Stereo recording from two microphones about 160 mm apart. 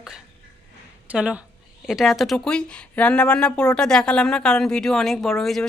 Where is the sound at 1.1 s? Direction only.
5° right (ahead or behind).